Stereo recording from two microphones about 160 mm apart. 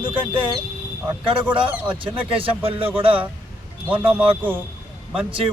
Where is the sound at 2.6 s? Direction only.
35° right (ahead or behind).